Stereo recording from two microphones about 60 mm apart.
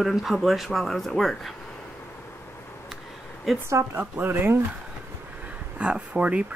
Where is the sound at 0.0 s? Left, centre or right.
Centre.